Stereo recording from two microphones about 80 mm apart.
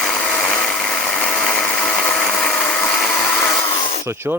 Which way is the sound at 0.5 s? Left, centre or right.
Centre.